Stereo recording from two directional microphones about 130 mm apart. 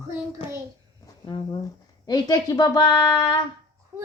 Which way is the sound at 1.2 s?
35° left (ahead or behind).